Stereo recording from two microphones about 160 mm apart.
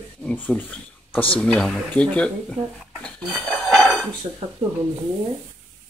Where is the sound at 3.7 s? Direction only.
Centre (ahead or behind).